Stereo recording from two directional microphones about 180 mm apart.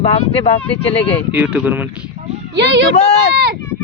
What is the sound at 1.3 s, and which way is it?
Speech, 5° right (ahead or behind).